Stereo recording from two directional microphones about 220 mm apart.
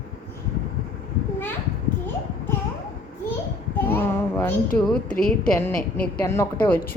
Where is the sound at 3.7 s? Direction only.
10° left (ahead or behind).